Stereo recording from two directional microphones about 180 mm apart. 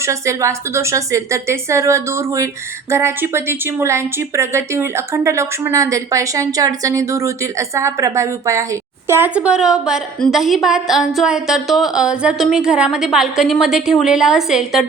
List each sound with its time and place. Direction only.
0.0 s a woman's voice: 15° right (ahead or behind)